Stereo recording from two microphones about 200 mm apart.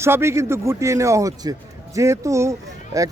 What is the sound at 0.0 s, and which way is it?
Speech, 15° right (ahead or behind).